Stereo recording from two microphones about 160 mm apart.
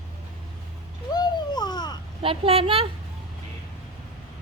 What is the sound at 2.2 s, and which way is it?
Speech, 35° right (ahead or behind).